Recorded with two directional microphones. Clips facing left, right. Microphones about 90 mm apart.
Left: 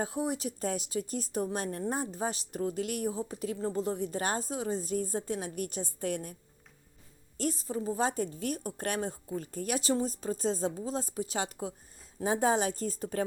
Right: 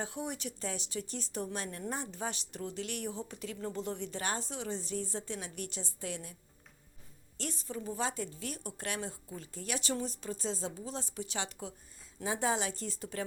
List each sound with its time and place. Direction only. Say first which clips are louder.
0.0 s speech: left 6 dB; 40° left (ahead or behind)
7.3 s speech: left 7 dB; 40° left (ahead or behind)